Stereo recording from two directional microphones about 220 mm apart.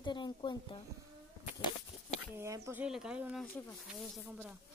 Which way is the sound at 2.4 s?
10° right (ahead or behind).